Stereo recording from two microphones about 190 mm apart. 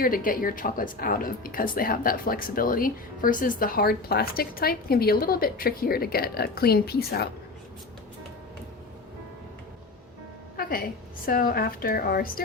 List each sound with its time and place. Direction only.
0.0 s a woman's voice: 45° left (ahead or behind)
10.6 s music: 50° left (ahead or behind)
11.3 s a woman's voice: 50° left (ahead or behind)